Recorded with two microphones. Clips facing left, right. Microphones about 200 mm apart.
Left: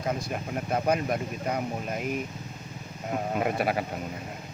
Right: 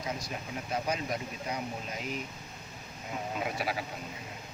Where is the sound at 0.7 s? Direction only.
55° left (ahead or behind).